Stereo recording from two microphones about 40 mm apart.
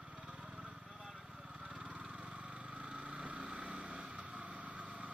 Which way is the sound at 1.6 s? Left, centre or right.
Right.